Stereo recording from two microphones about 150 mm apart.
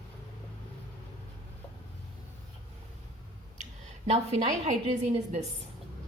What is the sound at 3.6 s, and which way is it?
A woman's voice, 45° right (ahead or behind).